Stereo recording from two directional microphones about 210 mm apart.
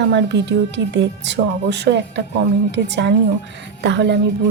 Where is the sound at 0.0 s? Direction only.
55° right (ahead or behind).